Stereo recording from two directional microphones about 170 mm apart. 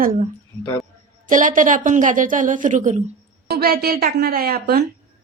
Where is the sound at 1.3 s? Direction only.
50° right (ahead or behind).